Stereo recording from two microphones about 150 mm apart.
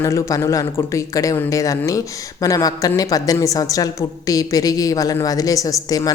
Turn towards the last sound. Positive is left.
turn(degrees=25)  # may be behind; listen again after turning